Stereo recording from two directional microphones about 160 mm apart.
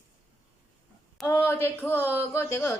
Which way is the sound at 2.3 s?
15° left (ahead or behind).